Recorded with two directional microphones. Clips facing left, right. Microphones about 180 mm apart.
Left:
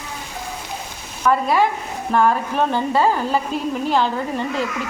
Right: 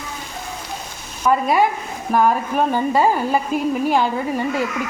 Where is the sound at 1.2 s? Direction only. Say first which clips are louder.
Right 1 dB; 10° right (ahead or behind).